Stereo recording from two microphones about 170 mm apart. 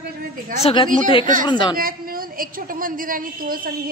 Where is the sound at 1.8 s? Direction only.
60° right (ahead or behind).